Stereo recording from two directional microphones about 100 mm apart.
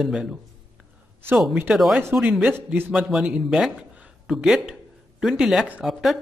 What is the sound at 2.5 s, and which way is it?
Speech, 20° right (ahead or behind).